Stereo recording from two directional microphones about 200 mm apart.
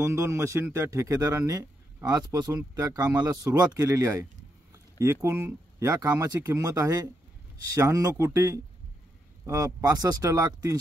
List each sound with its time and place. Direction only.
0.0 s a man's voice: 15° right (ahead or behind)